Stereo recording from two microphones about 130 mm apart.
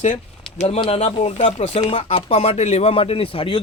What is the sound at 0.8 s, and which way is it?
Speech, 50° left (ahead or behind).